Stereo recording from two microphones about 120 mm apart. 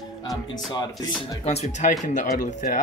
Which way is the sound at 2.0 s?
90° left.